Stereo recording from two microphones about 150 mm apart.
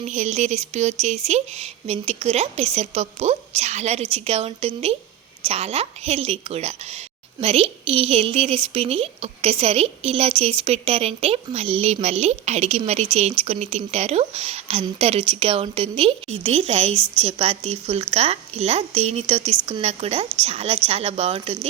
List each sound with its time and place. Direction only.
0.0 s a woman's voice: 50° right (ahead or behind)